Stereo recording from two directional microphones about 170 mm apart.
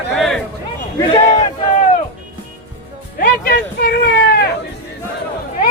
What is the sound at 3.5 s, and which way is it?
Speech, 65° left (ahead or behind).